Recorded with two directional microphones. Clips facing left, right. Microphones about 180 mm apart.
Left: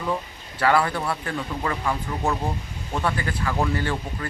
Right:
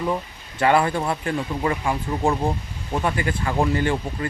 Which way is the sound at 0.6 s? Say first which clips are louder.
Right 2 dB; 20° right (ahead or behind).